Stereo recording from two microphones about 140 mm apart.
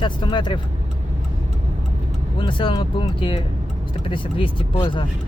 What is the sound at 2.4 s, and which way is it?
Speech, 35° left (ahead or behind).